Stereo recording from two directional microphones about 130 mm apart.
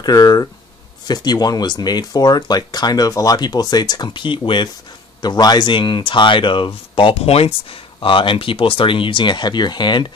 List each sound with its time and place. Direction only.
0.0 s speech: 30° left (ahead or behind)